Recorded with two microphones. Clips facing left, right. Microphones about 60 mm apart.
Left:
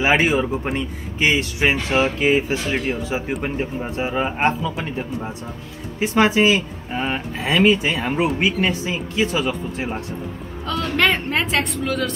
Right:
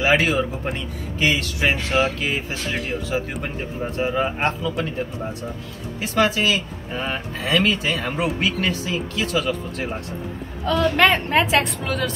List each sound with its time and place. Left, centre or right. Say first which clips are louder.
0.0 s speech: left 1 dB; left
5.9 s speech: left 4 dB; left
10.7 s a woman's voice: right 2 dB; centre